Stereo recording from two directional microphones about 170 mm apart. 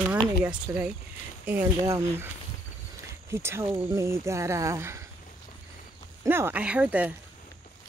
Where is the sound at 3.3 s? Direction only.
15° right (ahead or behind).